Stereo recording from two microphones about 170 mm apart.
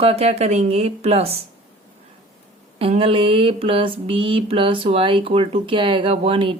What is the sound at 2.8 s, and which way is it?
Mantra, 35° right (ahead or behind).